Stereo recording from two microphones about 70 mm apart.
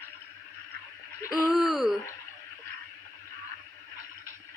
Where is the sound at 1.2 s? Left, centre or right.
Left.